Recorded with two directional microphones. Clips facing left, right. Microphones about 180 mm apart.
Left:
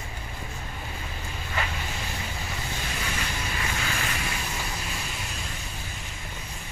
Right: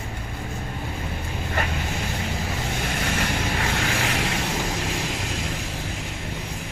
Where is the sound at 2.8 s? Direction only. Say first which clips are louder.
Right 8 dB; 65° right (ahead or behind); by 5.8 s 90° right.